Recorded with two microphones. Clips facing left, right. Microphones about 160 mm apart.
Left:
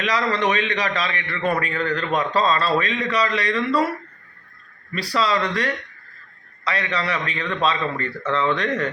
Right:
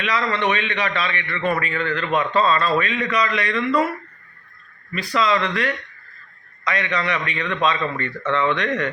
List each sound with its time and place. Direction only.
0.0 s a man's voice: 35° left (ahead or behind)
4.9 s a man's voice: 35° left (ahead or behind)